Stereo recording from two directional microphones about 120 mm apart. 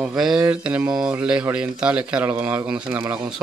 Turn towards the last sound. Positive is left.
turn(degrees=-15)  # may be behind; listen again after turning